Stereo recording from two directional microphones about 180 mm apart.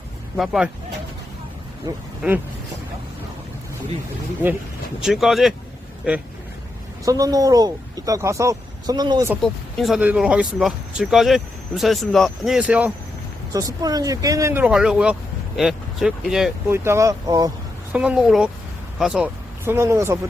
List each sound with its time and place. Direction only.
0.3 s speech: centre (ahead or behind)
2.2 s speech: 5° right (ahead or behind)
5.0 s speech: centre (ahead or behind)
7.0 s speech: 20° right (ahead or behind)
9.4 s speech: centre (ahead or behind)
13.5 s speech: 20° right (ahead or behind)
14.6 s speech: 5° right (ahead or behind)
16.7 s speech: 15° right (ahead or behind)
17.9 s speech: 5° right (ahead or behind)